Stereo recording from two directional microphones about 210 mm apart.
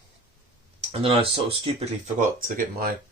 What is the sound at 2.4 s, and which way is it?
Speech, 40° right (ahead or behind).